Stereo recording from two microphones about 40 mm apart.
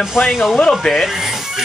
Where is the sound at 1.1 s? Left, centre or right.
Centre.